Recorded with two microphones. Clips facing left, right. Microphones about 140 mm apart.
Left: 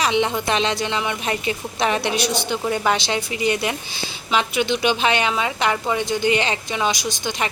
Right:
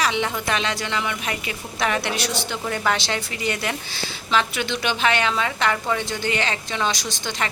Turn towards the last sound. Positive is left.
turn(degrees=15)  # may be behind; listen again after turning